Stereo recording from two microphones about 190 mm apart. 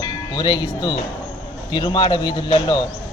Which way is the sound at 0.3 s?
20° left (ahead or behind).